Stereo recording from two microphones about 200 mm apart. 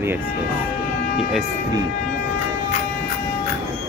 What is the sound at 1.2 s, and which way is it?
Speech, centre (ahead or behind).